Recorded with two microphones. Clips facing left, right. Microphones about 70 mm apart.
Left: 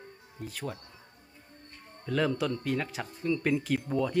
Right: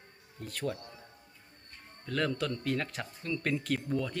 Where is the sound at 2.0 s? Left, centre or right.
Centre.